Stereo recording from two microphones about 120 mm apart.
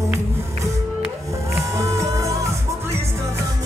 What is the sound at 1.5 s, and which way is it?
Music, 25° right (ahead or behind).